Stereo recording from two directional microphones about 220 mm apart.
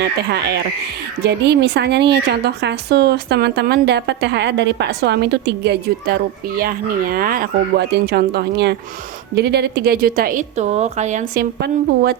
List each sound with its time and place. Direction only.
0.0 s a woman's voice: 50° right (ahead or behind); by 11.4 s 30° right (ahead or behind)